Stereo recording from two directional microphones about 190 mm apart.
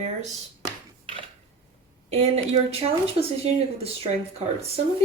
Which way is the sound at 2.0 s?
30° right (ahead or behind).